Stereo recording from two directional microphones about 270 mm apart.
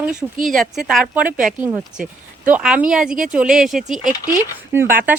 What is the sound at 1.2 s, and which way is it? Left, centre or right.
Speech, right.